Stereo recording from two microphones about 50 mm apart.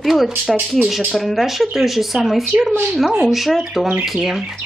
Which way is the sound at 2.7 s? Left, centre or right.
Right.